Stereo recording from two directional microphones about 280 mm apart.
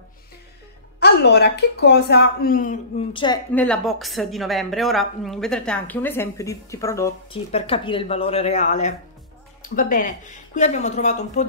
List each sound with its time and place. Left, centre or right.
0.9 s a woman's voice: left; by 3.3 s centre
3.5 s a woman's voice: centre; by 11.4 s left